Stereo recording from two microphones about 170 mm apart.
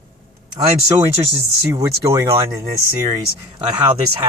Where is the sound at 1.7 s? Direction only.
20° right (ahead or behind).